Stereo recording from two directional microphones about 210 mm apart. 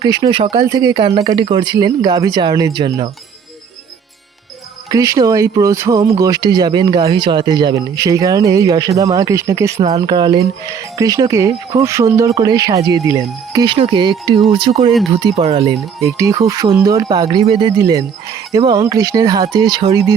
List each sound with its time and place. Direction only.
0.0 s speech: 20° right (ahead or behind)
4.9 s speech: 15° right (ahead or behind)
16.0 s speech: 15° right (ahead or behind)